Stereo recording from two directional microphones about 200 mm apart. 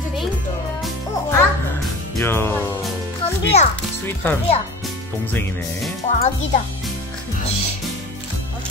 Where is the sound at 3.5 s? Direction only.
35° left (ahead or behind).